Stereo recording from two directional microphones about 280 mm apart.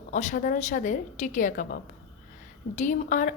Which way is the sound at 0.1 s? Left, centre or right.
Left.